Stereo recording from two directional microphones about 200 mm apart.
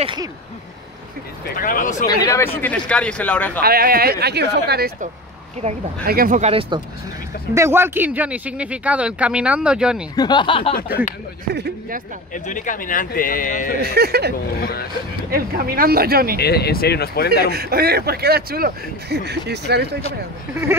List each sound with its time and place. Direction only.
0.0 s speech: 25° right (ahead or behind)
1.4 s speech: 45° left (ahead or behind)
2.0 s speech: 15° left (ahead or behind)
3.6 s speech: 50° right (ahead or behind)
6.4 s speech: 30° right (ahead or behind)
7.5 s speech: 10° right (ahead or behind)
10.1 s speech: 20° left (ahead or behind)
11.5 s speech: 55° right (ahead or behind)
12.4 s speech: 40° left (ahead or behind)
13.7 s speech: 50° right (ahead or behind)
14.6 s speech: 50° left (ahead or behind)
15.3 s speech: 50° right (ahead or behind)
16.3 s speech: 55° left (ahead or behind)
17.5 s speech: 50° right (ahead or behind)